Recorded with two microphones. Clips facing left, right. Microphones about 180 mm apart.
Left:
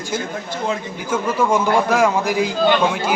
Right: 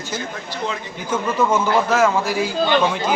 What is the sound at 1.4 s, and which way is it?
A man's voice, 10° left (ahead or behind).